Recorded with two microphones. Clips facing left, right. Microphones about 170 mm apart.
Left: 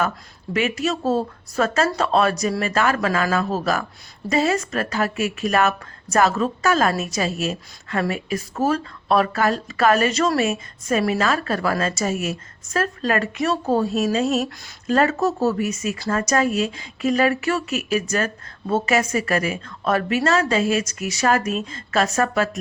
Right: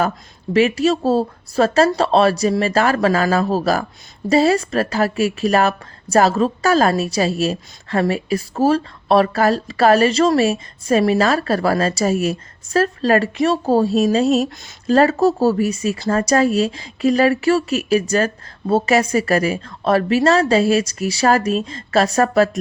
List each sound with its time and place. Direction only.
0.5 s speech: 35° right (ahead or behind)